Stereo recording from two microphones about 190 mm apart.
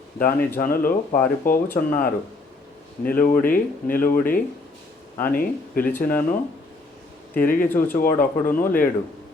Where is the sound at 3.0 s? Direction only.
50° left (ahead or behind).